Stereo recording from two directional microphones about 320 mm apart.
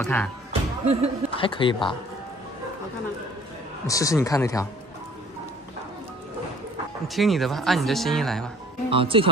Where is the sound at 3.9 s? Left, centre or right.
Centre.